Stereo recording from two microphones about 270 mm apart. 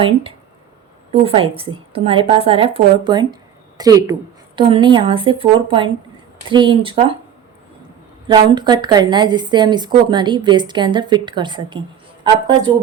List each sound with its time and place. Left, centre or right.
0.0 s a woman's voice: centre
8.3 s a woman's voice: centre